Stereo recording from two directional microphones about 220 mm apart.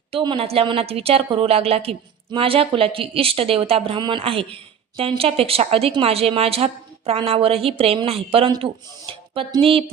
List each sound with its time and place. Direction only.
0.1 s speech: 25° right (ahead or behind)